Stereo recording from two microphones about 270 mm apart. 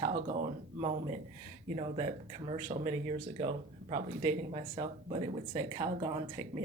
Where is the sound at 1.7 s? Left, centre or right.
Right.